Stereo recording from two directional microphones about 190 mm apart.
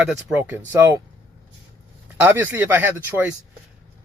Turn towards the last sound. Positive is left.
turn(degrees=-10)  # may be behind; listen again after turning